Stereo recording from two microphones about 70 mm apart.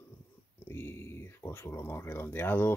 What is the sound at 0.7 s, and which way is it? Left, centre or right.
Speech, left.